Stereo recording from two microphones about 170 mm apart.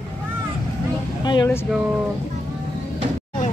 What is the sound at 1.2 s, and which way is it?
Speech, 25° left (ahead or behind).